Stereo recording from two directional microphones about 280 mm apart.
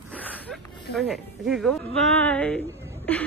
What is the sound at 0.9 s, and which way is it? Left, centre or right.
Speech, centre.